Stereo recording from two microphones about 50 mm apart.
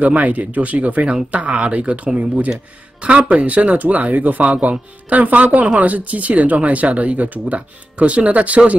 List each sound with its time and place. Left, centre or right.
0.0 s speech: right